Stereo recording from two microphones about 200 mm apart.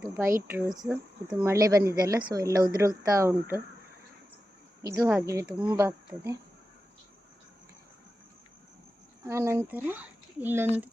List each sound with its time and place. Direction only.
0.0 s speech: 15° right (ahead or behind)
4.8 s speech: 15° right (ahead or behind)
9.2 s speech: 15° right (ahead or behind)